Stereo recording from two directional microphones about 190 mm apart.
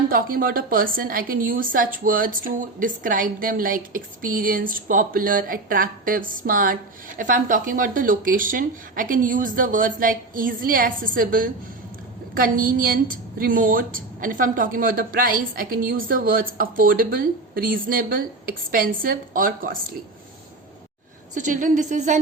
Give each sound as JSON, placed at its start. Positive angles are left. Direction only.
{"t": 0.1, "sound": "a woman's voice", "side_deg": -50}
{"t": 21.3, "sound": "a woman's voice", "side_deg": -40}